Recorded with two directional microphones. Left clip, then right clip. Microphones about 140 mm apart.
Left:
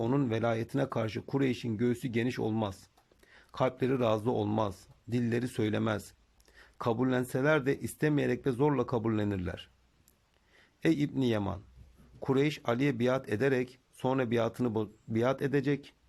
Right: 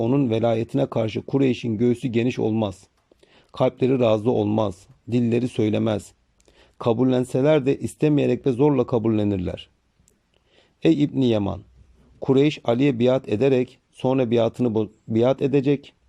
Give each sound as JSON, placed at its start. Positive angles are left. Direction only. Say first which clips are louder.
{"t": 0.0, "sound": "a man's voice", "louder": "right 9 dB", "side_deg": -20}